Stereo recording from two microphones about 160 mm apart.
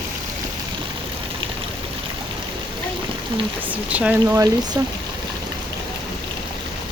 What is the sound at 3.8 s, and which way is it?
Speech, 10° right (ahead or behind).